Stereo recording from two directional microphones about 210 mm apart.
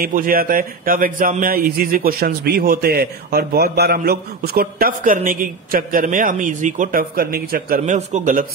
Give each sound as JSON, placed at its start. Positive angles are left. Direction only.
{"t": 0.0, "sound": "a man's voice", "side_deg": -45}